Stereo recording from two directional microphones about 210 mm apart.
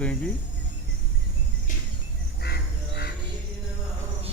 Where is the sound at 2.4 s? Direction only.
50° left (ahead or behind).